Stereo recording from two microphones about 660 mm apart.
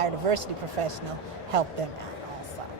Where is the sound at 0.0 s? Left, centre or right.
Right.